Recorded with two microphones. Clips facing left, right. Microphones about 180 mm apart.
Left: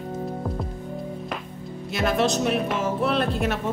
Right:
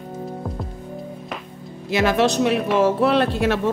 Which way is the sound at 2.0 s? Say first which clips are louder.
Right 4 dB; 80° right.